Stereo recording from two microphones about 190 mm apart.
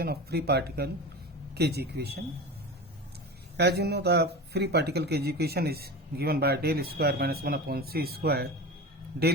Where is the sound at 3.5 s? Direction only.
60° right (ahead or behind).